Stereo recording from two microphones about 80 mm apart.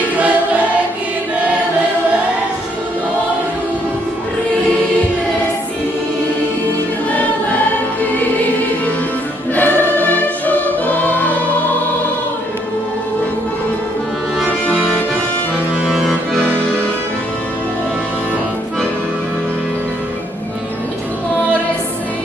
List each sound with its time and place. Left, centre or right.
9.6 s music: left
15.9 s accordion: centre